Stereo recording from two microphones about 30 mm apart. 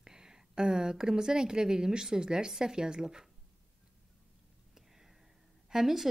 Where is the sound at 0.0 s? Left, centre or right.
Right.